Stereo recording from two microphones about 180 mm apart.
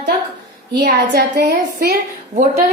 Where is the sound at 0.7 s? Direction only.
65° right (ahead or behind).